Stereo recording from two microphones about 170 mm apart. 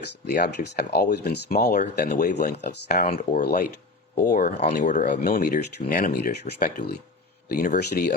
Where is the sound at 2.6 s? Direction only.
75° left (ahead or behind).